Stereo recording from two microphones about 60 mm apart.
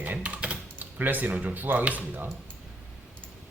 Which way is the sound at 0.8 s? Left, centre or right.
Right.